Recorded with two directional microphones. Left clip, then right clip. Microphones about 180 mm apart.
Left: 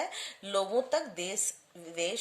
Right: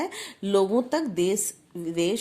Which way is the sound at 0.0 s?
30° right (ahead or behind).